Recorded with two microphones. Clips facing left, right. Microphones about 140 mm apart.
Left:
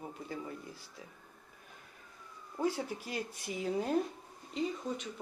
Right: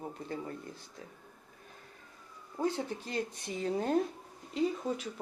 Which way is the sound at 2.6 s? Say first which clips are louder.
Right 1 dB; 10° left (ahead or behind).